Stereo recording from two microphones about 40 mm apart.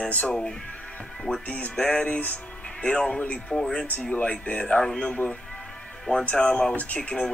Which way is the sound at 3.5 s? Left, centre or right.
Centre.